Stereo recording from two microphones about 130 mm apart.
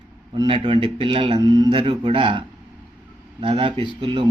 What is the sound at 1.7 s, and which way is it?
A man's voice, 40° right (ahead or behind).